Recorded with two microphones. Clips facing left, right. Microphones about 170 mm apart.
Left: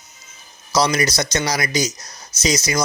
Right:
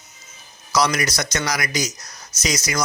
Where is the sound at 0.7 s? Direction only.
25° left (ahead or behind).